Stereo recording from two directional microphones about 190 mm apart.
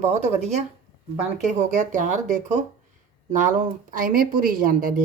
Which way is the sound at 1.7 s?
40° right (ahead or behind).